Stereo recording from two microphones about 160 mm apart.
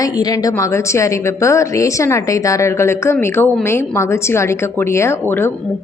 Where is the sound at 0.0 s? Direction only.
25° left (ahead or behind).